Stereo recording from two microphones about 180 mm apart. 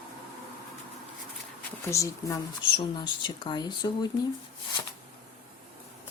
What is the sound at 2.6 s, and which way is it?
Speech, 25° left (ahead or behind).